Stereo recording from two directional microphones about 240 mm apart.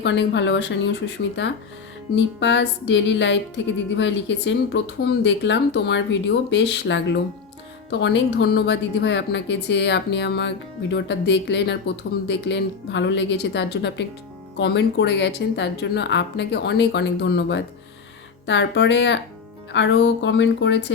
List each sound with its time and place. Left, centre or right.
0.0 s a woman's voice: left